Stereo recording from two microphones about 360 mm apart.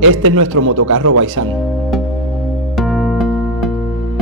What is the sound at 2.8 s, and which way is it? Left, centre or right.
Music, centre.